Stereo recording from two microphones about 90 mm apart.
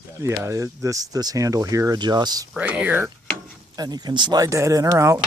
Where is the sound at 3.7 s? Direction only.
45° right (ahead or behind).